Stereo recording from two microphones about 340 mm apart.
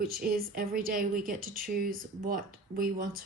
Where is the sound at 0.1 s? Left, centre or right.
Right.